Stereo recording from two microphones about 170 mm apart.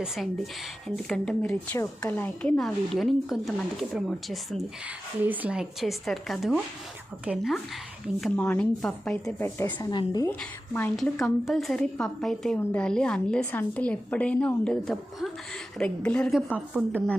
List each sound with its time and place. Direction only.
0.9 s a woman's voice: 5° left (ahead or behind)
9.6 s a woman's voice: 15° left (ahead or behind)
10.9 s a woman's voice: centre (ahead or behind)
16.6 s a woman's voice: 5° right (ahead or behind)